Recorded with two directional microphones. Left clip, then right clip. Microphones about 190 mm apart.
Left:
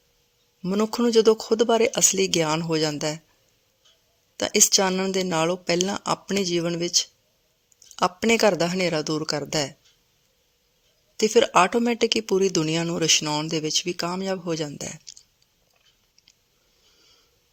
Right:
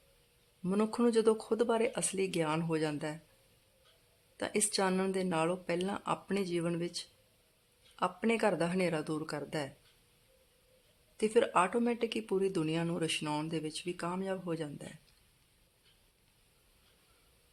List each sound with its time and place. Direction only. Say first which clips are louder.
0.6 s speech: left 8 dB; 25° left (ahead or behind)
4.4 s speech: left 13 dB; 35° left (ahead or behind)
11.2 s speech: left 11 dB; 30° left (ahead or behind)